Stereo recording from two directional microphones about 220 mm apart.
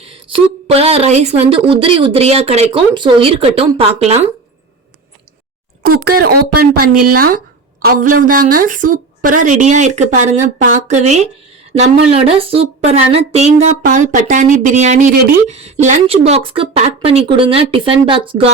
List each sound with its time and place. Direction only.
0.0 s speech: 25° right (ahead or behind)
5.8 s speech: 45° right (ahead or behind)
6.9 s speech: 90° right
7.2 s a woman's voice: 40° right (ahead or behind); by 18.4 s 25° right (ahead or behind)